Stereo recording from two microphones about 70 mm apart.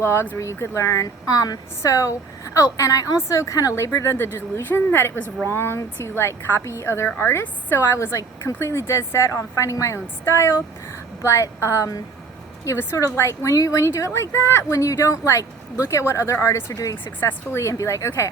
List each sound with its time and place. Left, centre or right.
0.0 s speech: left
0.3 s a woman's voice: left
1.8 s a woman's voice: left
13.5 s a woman's voice: left
14.7 s a woman's voice: left
16.7 s a woman's voice: left
17.0 s speech: left